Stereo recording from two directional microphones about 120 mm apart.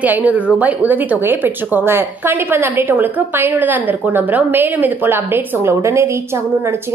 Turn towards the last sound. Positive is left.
turn(degrees=-25)  # may be behind; listen again after turning